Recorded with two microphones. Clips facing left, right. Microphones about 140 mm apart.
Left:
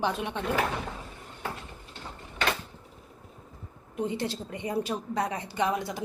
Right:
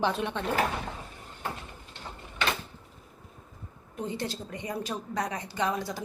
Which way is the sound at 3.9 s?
20° left (ahead or behind).